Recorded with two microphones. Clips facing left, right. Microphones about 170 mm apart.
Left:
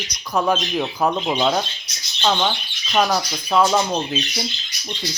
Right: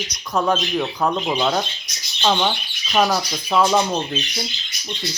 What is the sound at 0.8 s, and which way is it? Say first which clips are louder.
Speech: left 1 dB; 10° left (ahead or behind).